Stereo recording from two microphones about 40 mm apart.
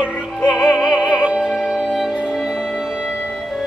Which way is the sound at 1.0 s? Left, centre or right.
Right.